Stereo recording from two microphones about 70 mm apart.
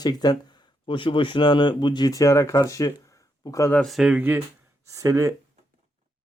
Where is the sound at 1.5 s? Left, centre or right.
Left.